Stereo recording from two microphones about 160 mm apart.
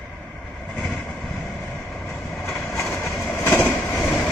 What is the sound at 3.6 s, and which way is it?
Vehicle, 5° left (ahead or behind).